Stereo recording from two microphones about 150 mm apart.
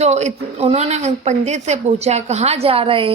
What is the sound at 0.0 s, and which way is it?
A woman's voice, 50° right (ahead or behind).